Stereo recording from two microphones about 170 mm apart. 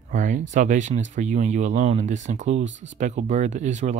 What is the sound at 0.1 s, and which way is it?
Speech, 45° right (ahead or behind).